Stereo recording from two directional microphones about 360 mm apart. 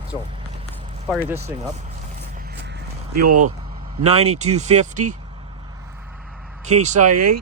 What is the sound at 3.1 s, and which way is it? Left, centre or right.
Speech, right.